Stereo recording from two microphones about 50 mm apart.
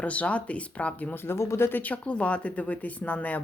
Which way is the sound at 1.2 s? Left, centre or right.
Left.